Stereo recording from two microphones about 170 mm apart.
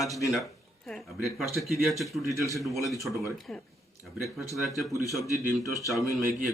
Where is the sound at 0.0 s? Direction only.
Centre (ahead or behind).